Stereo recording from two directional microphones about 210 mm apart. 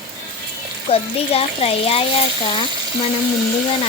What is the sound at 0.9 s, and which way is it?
A child's voice, 30° left (ahead or behind).